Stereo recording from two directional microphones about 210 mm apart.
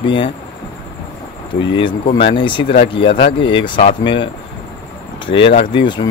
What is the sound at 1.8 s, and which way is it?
Speech, 25° left (ahead or behind).